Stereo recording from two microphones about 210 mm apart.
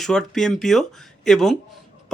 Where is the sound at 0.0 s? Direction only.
Centre (ahead or behind).